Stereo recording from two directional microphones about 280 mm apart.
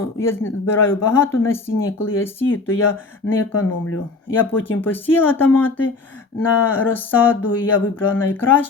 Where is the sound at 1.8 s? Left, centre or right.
Left.